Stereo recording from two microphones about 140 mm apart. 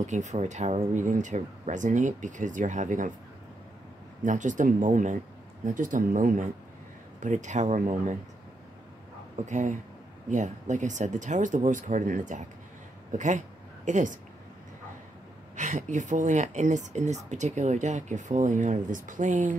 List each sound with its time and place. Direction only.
0.0 s speech: 60° right (ahead or behind)
4.2 s speech: 65° right (ahead or behind)
9.5 s speech: 60° right (ahead or behind)
15.5 s speech: 60° right (ahead or behind)